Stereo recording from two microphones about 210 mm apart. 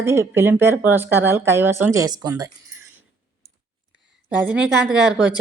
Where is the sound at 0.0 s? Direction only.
10° right (ahead or behind).